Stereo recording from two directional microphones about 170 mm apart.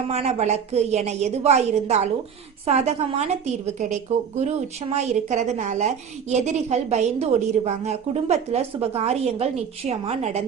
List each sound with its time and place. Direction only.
0.1 s a woman's voice: 40° right (ahead or behind)
4.4 s a woman's voice: 40° right (ahead or behind)